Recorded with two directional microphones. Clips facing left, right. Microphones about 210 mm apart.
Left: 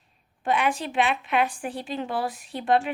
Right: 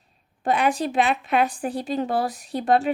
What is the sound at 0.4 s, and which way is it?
A woman's voice, 40° right (ahead or behind).